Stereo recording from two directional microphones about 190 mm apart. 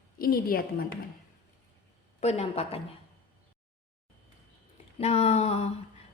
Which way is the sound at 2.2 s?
35° left (ahead or behind).